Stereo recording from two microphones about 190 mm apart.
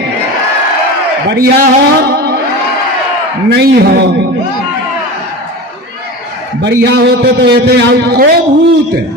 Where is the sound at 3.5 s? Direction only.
55° right (ahead or behind).